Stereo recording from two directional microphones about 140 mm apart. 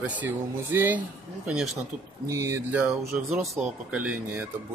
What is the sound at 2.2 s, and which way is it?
Speech, 20° right (ahead or behind).